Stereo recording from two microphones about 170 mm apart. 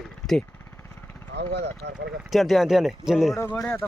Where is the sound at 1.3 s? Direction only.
80° right.